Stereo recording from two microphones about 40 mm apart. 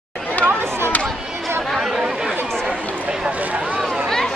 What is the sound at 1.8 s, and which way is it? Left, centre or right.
Chatter, centre.